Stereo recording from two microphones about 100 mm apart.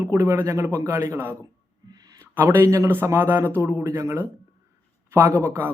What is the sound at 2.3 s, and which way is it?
A man's voice, 25° right (ahead or behind).